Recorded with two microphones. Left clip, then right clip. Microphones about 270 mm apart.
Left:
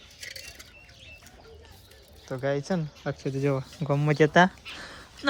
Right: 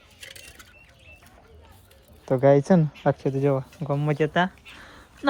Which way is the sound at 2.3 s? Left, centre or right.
Right.